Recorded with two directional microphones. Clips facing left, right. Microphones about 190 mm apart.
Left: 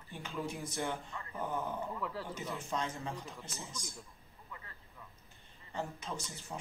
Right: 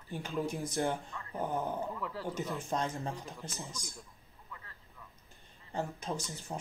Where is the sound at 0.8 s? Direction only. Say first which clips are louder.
Right 5 dB; 35° right (ahead or behind).